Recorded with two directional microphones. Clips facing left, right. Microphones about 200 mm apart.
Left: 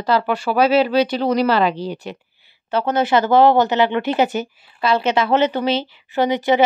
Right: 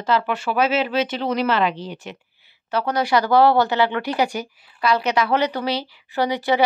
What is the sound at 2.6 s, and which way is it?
Speech, 25° left (ahead or behind).